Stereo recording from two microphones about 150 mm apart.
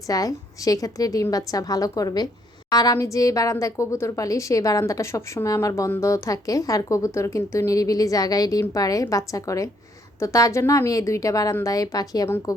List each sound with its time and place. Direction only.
0.1 s a woman's voice: 25° left (ahead or behind)